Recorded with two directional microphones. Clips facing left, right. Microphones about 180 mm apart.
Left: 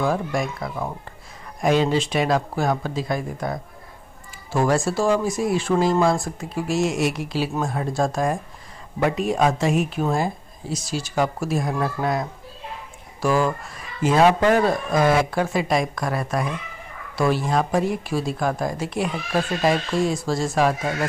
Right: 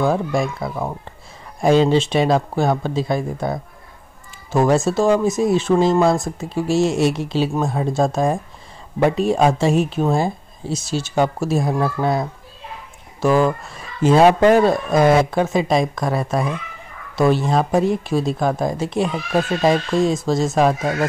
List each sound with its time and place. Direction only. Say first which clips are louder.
0.0 s speech: right 4 dB; 25° right (ahead or behind)